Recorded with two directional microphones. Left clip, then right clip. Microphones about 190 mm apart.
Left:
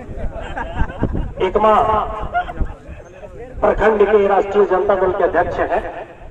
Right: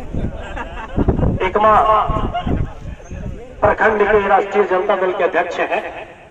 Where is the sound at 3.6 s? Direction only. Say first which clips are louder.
Even; 25° right (ahead or behind).